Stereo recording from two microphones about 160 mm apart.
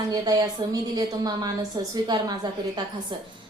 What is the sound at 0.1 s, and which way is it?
A woman's voice, 25° right (ahead or behind).